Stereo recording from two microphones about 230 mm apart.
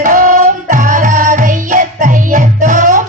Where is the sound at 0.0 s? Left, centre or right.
Right.